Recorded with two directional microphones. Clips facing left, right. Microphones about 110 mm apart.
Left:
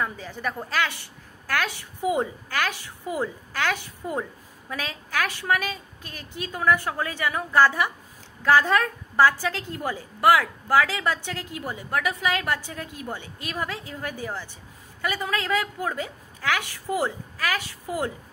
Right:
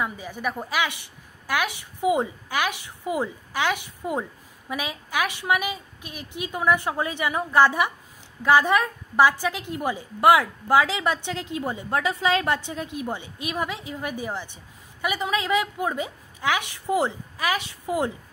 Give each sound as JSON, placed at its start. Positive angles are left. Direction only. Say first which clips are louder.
{"t": 0.0, "sound": "a woman's voice", "louder": "right 1 dB", "side_deg": -10}